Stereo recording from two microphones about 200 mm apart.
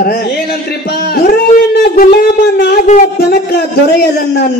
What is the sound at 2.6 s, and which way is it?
Speech, 55° left (ahead or behind).